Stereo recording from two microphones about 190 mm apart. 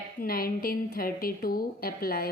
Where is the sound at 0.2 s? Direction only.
50° left (ahead or behind).